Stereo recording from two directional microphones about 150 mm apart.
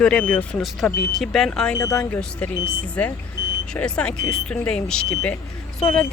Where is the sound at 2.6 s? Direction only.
30° left (ahead or behind).